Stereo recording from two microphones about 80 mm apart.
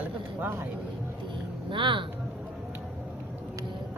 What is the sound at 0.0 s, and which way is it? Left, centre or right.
Vehicle, right.